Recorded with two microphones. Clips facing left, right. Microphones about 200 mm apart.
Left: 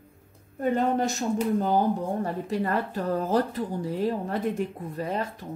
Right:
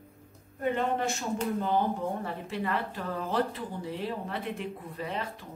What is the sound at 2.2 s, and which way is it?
A woman's voice, 40° left (ahead or behind).